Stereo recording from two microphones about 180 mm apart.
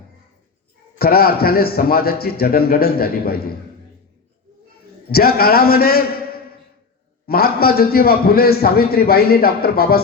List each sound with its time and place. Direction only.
0.9 s a man's voice: 60° left (ahead or behind)
5.1 s a man's voice: 60° left (ahead or behind)